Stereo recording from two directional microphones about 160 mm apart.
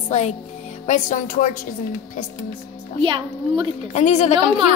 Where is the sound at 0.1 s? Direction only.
50° left (ahead or behind).